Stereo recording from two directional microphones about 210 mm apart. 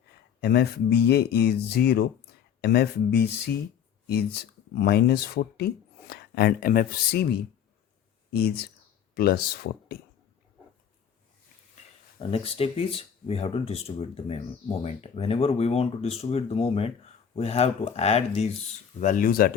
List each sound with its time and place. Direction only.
0.4 s speech: 50° left (ahead or behind)
12.3 s speech: 25° left (ahead or behind); by 19.5 s 45° left (ahead or behind)